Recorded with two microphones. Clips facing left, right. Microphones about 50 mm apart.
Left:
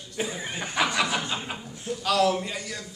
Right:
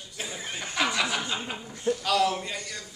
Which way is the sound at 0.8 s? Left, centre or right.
Centre.